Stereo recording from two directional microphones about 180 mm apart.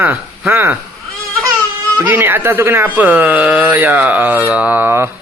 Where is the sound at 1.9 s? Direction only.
10° right (ahead or behind).